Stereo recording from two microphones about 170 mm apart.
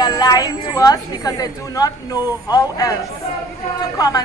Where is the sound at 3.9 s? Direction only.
20° left (ahead or behind).